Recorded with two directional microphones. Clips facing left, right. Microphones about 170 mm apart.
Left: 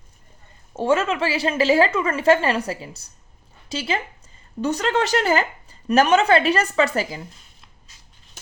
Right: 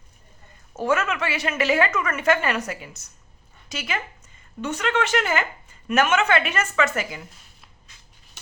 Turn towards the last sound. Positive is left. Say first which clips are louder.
# left 3 dB
turn(degrees=30)  # may be behind; listen again after turning